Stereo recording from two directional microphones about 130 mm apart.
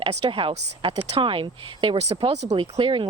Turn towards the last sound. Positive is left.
turn(degrees=-45)  # may be behind; listen again after turning